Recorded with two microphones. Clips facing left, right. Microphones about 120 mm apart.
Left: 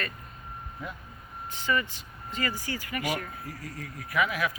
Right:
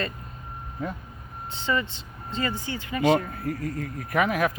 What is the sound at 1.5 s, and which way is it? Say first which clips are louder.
Speech: right 2 dB; 25° right (ahead or behind).